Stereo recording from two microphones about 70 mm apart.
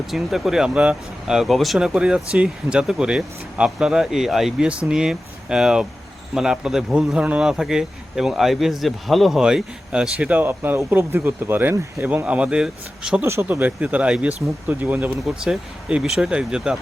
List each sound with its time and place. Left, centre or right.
0.1 s speech: centre
1.8 s speech: centre
9.4 s speech: centre; by 12.0 s right
12.0 s speech: right
13.4 s speech: right
16.0 s speech: centre